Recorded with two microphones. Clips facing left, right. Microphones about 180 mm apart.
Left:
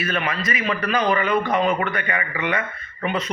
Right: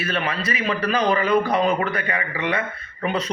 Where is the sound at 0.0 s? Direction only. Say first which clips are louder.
Even; 30° right (ahead or behind).